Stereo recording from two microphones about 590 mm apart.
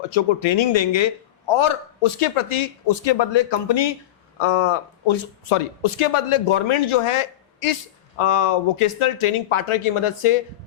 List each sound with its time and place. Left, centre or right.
0.1 s a man's voice: left